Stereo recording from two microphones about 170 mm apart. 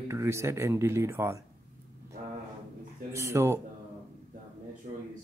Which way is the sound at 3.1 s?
15° right (ahead or behind).